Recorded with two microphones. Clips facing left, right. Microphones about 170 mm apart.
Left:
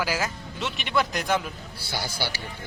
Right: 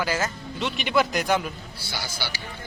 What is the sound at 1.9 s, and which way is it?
Speech, 50° left (ahead or behind).